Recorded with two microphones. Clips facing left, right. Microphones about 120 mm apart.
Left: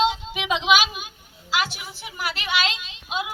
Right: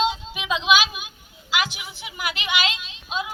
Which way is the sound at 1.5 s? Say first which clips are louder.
Even; 35° left (ahead or behind).